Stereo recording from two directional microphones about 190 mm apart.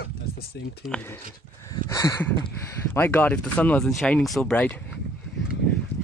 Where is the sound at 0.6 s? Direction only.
65° left (ahead or behind).